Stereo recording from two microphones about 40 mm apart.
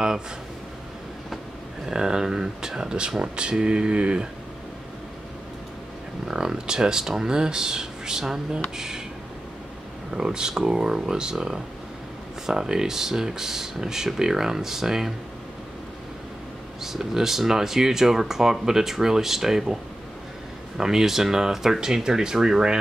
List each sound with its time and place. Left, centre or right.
1.9 s speech: centre
6.2 s speech: centre
10.1 s speech: centre
16.8 s speech: centre